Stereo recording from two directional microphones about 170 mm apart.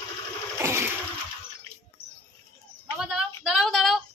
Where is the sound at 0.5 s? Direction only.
15° right (ahead or behind).